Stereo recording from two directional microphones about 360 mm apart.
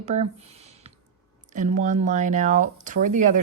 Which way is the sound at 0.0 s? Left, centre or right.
Centre.